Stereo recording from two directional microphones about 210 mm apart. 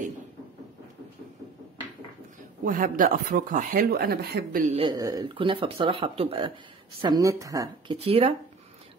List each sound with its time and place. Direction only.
2.6 s speech: 40° right (ahead or behind)
4.8 s speech: 15° right (ahead or behind)
8.0 s speech: 25° right (ahead or behind)